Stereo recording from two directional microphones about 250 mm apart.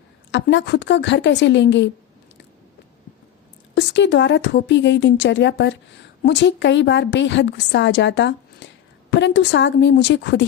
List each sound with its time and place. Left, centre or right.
0.3 s a woman's voice: left
3.8 s a woman's voice: left